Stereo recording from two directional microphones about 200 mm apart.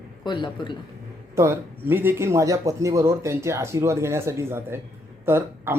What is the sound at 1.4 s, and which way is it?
Speech, 10° right (ahead or behind).